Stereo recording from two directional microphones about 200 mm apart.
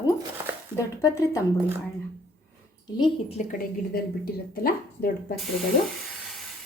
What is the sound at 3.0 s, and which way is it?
Speech, 30° left (ahead or behind).